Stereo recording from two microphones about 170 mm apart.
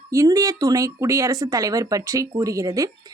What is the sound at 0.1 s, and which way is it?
Speech, 20° right (ahead or behind).